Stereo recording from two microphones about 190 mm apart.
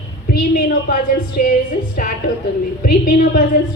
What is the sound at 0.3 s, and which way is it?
A woman's voice, 45° left (ahead or behind).